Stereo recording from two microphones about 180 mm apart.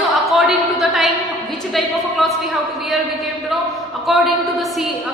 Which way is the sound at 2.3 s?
Centre (ahead or behind).